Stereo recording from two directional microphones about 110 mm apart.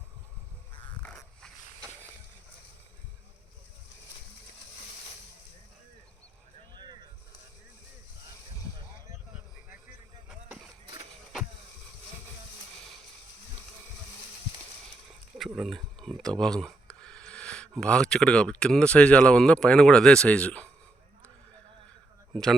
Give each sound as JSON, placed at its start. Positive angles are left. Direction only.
{"t": 1.0, "sound": "a sound", "side_deg": 5}
{"t": 6.7, "sound": "vehicle", "side_deg": -40}
{"t": 15.4, "sound": "speech", "side_deg": -5}
{"t": 22.3, "sound": "speech", "side_deg": 0}